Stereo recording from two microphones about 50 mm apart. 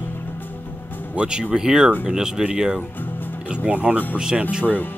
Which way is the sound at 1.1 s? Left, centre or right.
Centre.